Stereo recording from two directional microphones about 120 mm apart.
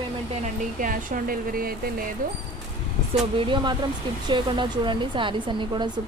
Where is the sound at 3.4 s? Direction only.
45° right (ahead or behind).